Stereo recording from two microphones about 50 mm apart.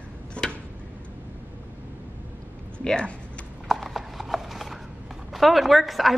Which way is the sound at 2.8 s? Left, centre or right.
Centre.